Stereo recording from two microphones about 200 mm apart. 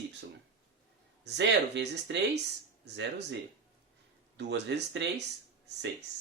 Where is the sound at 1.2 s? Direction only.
60° right (ahead or behind).